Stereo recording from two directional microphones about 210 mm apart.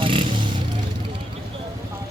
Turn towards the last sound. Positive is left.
turn(degrees=-25)  # may be behind; listen again after turning